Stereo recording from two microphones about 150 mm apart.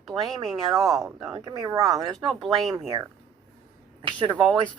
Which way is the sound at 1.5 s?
30° right (ahead or behind).